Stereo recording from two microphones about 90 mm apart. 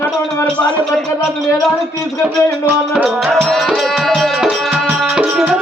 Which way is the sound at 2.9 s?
10° right (ahead or behind).